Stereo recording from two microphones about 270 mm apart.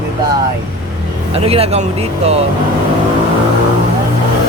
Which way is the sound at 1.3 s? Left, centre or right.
Right.